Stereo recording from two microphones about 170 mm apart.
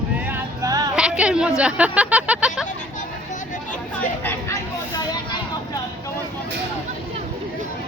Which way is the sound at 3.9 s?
10° left (ahead or behind).